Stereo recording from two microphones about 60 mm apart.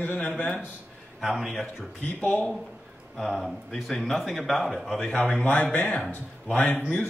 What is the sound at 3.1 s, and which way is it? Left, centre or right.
Speech, centre.